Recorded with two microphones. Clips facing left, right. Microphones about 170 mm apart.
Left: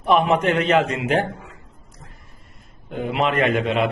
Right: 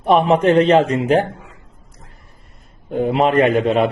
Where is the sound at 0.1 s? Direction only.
30° right (ahead or behind).